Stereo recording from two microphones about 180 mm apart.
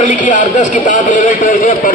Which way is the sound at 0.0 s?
45° left (ahead or behind).